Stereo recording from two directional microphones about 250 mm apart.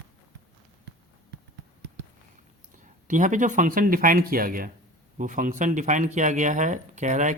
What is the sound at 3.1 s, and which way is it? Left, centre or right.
A man's voice, right.